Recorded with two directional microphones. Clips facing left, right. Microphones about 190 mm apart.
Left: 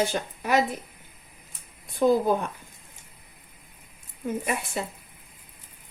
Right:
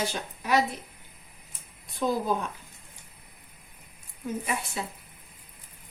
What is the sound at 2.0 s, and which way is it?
Speech, 50° left (ahead or behind).